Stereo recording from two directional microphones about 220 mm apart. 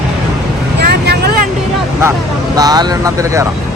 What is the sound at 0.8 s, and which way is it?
Vehicle, 45° right (ahead or behind).